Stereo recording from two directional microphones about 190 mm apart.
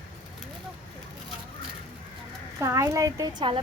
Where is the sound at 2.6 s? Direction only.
15° right (ahead or behind).